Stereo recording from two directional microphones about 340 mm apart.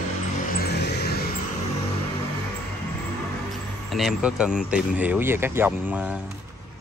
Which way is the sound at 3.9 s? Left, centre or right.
Centre.